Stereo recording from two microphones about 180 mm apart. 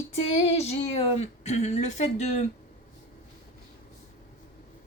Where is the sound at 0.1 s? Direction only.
35° left (ahead or behind).